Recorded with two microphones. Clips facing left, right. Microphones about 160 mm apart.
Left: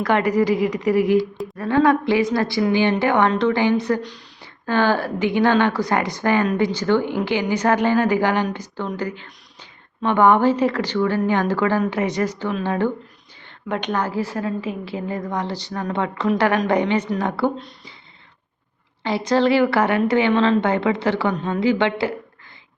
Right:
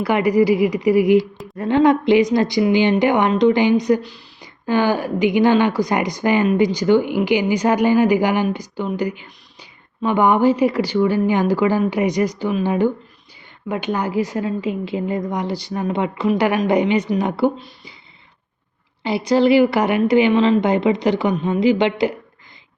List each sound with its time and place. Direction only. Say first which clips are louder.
0.0 s speech: right 2 dB; 10° right (ahead or behind)
19.0 s speech: right 3 dB; 10° right (ahead or behind)